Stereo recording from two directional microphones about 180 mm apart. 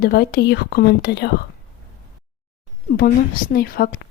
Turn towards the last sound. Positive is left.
turn(degrees=55)  # may be behind; listen again after turning